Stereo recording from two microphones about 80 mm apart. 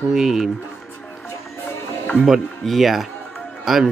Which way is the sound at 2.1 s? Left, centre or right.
Centre.